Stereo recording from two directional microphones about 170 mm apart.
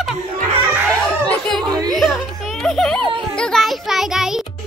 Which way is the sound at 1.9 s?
Centre (ahead or behind).